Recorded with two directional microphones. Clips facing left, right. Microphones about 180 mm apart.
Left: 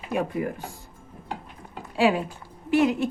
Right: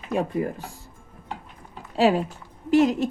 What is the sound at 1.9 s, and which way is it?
A woman's voice, 40° right (ahead or behind).